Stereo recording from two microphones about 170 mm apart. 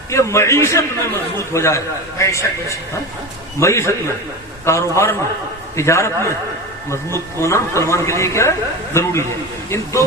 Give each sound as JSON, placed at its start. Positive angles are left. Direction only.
{"t": 0.1, "sound": "speech", "side_deg": 15}